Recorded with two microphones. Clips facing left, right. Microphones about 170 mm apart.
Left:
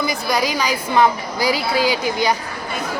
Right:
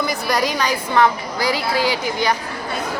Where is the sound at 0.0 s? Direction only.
Centre (ahead or behind).